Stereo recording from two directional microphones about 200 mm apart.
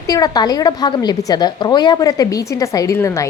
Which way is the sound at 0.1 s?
20° left (ahead or behind).